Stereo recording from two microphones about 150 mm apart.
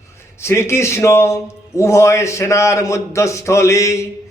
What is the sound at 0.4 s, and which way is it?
A man's voice, 20° left (ahead or behind).